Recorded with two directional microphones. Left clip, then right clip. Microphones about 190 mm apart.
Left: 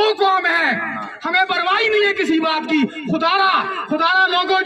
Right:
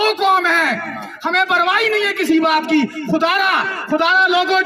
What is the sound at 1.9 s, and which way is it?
Speech, 45° right (ahead or behind).